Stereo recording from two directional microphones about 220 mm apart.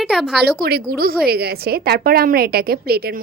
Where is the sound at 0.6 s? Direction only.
45° right (ahead or behind).